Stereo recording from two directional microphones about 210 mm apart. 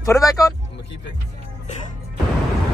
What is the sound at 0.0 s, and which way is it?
Speech, 15° left (ahead or behind).